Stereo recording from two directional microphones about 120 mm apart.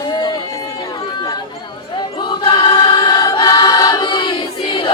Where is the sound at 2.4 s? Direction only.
40° left (ahead or behind).